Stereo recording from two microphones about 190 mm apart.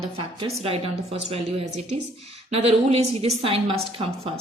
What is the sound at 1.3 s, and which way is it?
A woman's voice, 35° right (ahead or behind).